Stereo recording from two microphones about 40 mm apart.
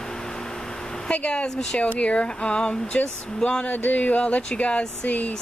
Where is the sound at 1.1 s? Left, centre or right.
Left.